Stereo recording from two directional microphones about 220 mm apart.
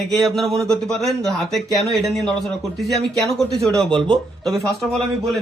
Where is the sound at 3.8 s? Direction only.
20° right (ahead or behind).